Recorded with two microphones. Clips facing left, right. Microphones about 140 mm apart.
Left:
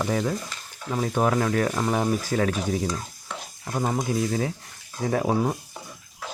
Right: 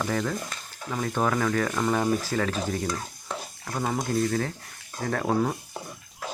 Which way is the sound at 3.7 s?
15° left (ahead or behind).